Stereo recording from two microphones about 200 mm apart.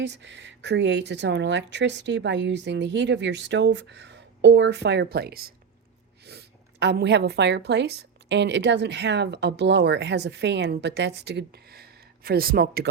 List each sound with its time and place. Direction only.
0.0 s a woman's voice: 60° right (ahead or behind)